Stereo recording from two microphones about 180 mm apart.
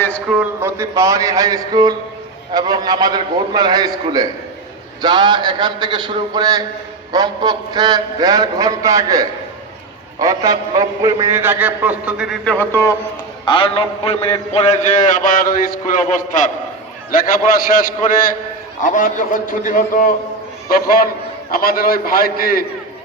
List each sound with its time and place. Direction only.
0.3 s a man's voice: 10° right (ahead or behind)
12.5 s a man's voice: 15° left (ahead or behind)
13.4 s a man's voice: 30° left (ahead or behind); by 22.6 s 55° left (ahead or behind)